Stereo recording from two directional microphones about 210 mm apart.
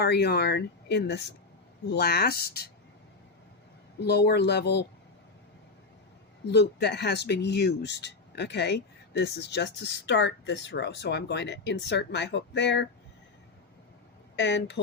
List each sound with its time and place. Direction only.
0.0 s speech: 50° left (ahead or behind)
4.0 s speech: 50° left (ahead or behind)
6.5 s speech: 50° left (ahead or behind)
14.3 s speech: 55° left (ahead or behind)